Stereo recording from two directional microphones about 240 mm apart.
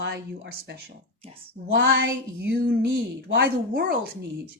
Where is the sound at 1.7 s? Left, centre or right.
Right.